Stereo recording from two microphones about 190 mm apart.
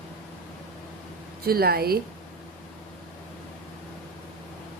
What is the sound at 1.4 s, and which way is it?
Speech, 55° right (ahead or behind).